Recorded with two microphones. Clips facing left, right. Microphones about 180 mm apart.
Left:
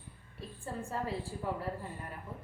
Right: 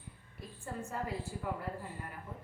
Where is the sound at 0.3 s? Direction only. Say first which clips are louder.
Left 2 dB; 30° left (ahead or behind).